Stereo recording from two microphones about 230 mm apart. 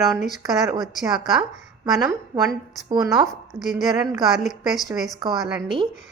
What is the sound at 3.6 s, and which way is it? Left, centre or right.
Speech, centre.